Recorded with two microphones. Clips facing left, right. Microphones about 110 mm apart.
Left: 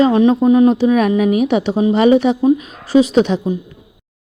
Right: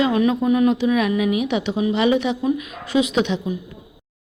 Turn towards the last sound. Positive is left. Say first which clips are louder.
# left 7 dB
turn(degrees=40)  # may be behind; listen again after turning